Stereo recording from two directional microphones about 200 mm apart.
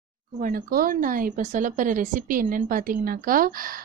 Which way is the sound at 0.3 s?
45° right (ahead or behind).